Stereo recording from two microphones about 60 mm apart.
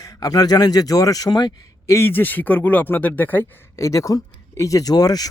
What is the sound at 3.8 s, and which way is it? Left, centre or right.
Speech, left.